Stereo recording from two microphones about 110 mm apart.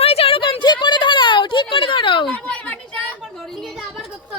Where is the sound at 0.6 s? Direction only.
45° left (ahead or behind).